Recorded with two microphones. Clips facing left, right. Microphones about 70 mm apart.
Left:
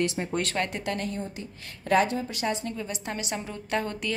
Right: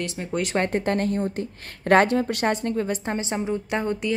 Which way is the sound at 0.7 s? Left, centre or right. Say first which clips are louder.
Right 8 dB; right.